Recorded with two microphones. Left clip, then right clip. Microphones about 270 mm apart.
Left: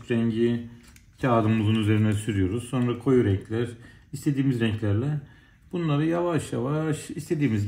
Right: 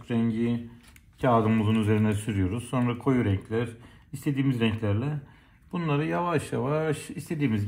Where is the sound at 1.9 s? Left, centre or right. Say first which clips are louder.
Left 1 dB; centre.